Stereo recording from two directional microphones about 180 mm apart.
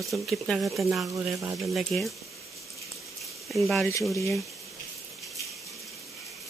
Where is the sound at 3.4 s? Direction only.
Centre (ahead or behind).